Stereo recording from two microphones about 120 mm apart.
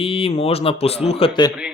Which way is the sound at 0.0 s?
55° left (ahead or behind).